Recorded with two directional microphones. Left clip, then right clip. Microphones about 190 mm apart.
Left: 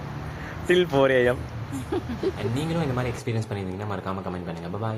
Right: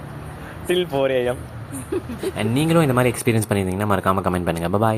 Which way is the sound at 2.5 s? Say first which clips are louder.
Right 10 dB; 45° right (ahead or behind).